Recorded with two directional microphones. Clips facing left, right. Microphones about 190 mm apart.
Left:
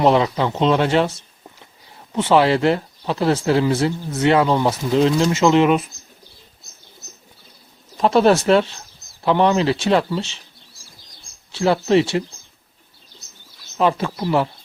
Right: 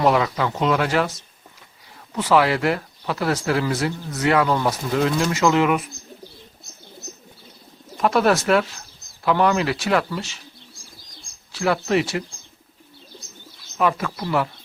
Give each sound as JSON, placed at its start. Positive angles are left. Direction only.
{"t": 0.0, "sound": "speech", "side_deg": 25}
{"t": 7.9, "sound": "speech", "side_deg": 25}
{"t": 11.5, "sound": "speech", "side_deg": 30}
{"t": 13.7, "sound": "speech", "side_deg": 25}